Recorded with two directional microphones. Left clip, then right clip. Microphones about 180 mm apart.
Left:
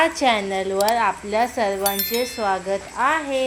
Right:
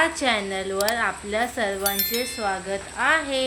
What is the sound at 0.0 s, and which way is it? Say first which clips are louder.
Speech: left 4 dB; 15° left (ahead or behind).